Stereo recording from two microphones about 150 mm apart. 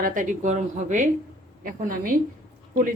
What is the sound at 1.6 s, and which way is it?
Speech, 70° right (ahead or behind).